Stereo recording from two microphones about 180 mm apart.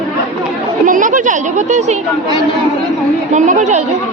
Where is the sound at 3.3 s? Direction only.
40° right (ahead or behind).